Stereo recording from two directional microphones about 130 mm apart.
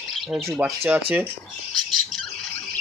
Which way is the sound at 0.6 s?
10° right (ahead or behind).